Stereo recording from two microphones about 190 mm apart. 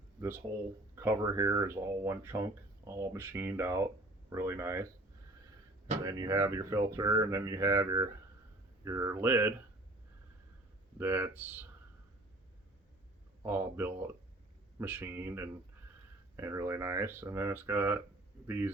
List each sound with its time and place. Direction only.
0.2 s speech: 10° right (ahead or behind)
6.0 s speech: 20° right (ahead or behind)
10.9 s speech: 10° right (ahead or behind)
13.4 s speech: 10° right (ahead or behind)